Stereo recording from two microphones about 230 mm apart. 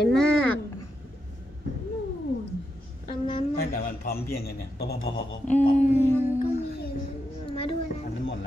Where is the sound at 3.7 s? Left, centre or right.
Left.